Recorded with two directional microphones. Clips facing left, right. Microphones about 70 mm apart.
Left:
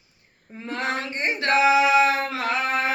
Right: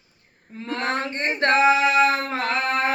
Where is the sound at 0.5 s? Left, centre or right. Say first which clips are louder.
Right 2 dB; centre.